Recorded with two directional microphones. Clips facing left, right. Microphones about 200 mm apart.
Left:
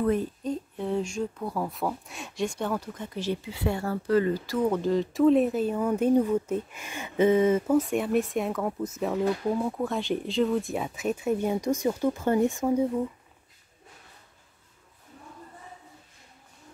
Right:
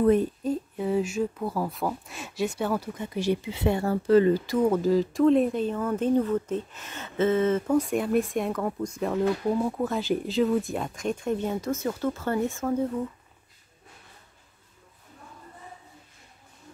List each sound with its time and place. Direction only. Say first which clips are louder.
0.0 s speech: right 5 dB; 20° right (ahead or behind)
0.4 s speech: right 3 dB; 5° right (ahead or behind); by 4.6 s 25° right (ahead or behind)
4.6 s speech: even; 5° right (ahead or behind); by 12.8 s 15° left (ahead or behind)